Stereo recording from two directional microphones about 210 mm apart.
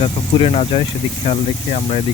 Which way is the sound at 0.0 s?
25° left (ahead or behind).